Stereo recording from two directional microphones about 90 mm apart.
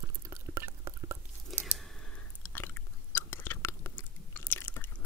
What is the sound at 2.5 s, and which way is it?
Chewing, 25° left (ahead or behind).